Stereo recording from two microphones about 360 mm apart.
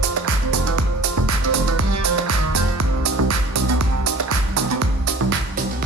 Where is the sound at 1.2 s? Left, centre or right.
Right.